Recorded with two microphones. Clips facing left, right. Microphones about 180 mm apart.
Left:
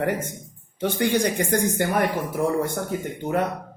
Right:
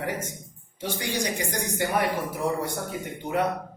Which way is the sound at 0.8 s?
55° left (ahead or behind).